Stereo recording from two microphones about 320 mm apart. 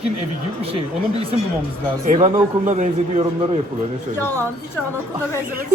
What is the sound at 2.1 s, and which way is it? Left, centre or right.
A man's voice, right.